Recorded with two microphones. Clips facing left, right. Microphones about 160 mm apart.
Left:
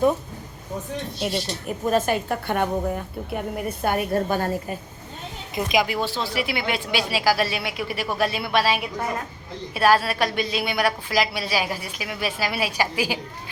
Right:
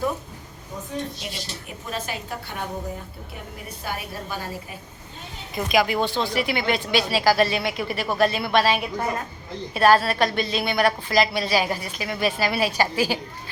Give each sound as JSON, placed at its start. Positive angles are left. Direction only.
{"t": 1.2, "sound": "a woman's voice", "side_deg": 50}
{"t": 5.5, "sound": "a woman's voice", "side_deg": 15}
{"t": 5.9, "sound": "a woman's voice", "side_deg": 5}